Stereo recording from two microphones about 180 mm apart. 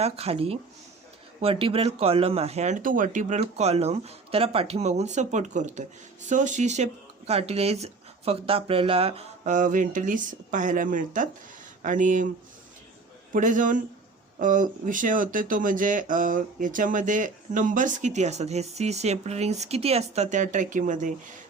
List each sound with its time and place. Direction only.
0.0 s speech: 35° right (ahead or behind)
13.3 s speech: 45° right (ahead or behind)